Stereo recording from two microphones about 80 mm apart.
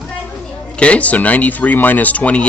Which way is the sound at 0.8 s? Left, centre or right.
Centre.